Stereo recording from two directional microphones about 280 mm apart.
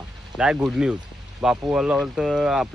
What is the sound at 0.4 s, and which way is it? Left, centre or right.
Speech, centre.